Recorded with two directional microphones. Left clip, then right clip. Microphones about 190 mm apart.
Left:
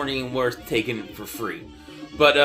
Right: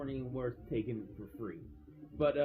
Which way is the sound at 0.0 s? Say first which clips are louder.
Left 16 dB; 15° left (ahead or behind).